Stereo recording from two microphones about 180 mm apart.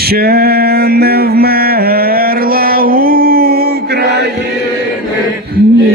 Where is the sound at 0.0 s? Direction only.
60° right (ahead or behind).